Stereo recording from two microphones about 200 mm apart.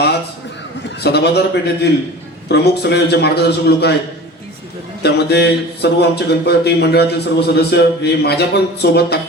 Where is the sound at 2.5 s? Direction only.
55° left (ahead or behind).